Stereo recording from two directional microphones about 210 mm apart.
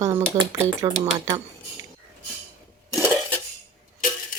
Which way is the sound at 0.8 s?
25° right (ahead or behind).